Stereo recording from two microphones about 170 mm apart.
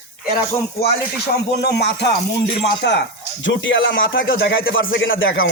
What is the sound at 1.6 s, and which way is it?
Speech, 80° left.